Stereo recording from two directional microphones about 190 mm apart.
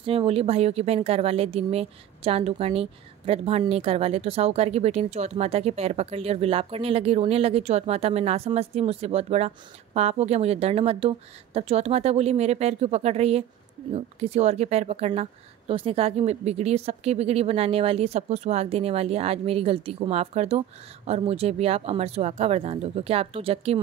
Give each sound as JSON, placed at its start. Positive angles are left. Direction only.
{"t": 0.0, "sound": "speech", "side_deg": -30}